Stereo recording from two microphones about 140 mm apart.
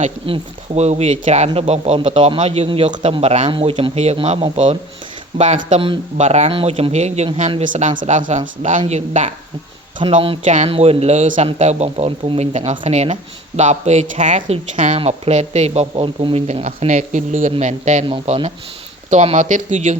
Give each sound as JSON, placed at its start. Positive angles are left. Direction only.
{"t": 0.3, "sound": "speech", "side_deg": -50}
{"t": 5.4, "sound": "speech", "side_deg": -60}
{"t": 7.7, "sound": "speech", "side_deg": -65}
{"t": 10.0, "sound": "speech", "side_deg": -40}
{"t": 10.4, "sound": "speech", "side_deg": -60}
{"t": 10.7, "sound": "speech", "side_deg": -45}
{"t": 18.1, "sound": "speech", "side_deg": -45}
{"t": 19.1, "sound": "speech", "side_deg": -55}